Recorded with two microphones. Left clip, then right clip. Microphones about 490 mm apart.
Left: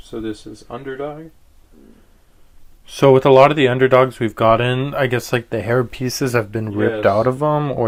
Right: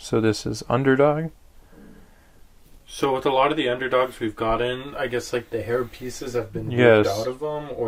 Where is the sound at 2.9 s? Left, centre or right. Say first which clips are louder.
Left 11 dB; left.